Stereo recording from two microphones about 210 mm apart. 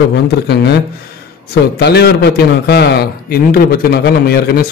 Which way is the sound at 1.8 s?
50° left (ahead or behind).